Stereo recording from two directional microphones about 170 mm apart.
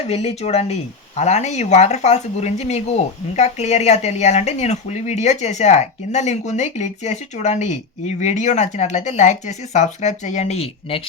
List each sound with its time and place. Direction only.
0.1 s speech: 40° left (ahead or behind)